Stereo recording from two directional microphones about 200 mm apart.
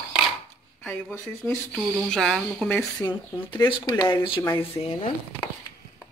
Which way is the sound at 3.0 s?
20° left (ahead or behind).